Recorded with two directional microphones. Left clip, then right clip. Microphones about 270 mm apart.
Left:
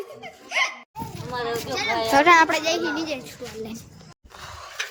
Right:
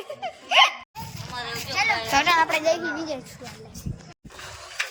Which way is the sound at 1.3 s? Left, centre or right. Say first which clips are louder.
Left 5 dB; left.